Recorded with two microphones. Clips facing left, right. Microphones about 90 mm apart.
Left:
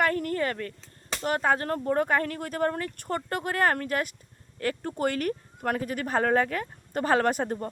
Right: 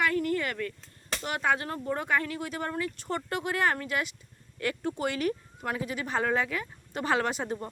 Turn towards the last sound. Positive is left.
turn(degrees=50)  # may be behind; listen again after turning